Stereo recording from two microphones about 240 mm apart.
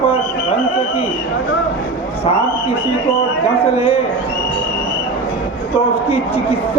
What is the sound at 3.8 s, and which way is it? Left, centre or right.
Speech, left.